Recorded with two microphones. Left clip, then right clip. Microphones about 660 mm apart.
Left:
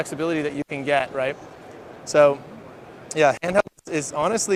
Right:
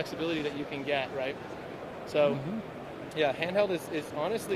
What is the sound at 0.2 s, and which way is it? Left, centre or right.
Speech, left.